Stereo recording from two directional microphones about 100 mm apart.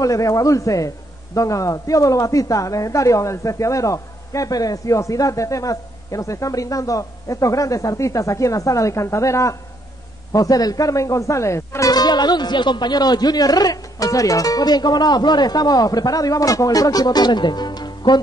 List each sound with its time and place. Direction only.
0.0 s a man's voice: 35° left (ahead or behind)
11.9 s speech: 45° left (ahead or behind)